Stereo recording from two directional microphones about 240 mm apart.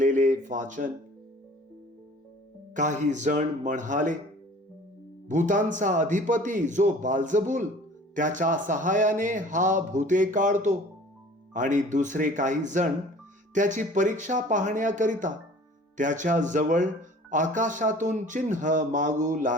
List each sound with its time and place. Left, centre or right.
0.0 s a sound: right
2.7 s speech: right
5.3 s speech: right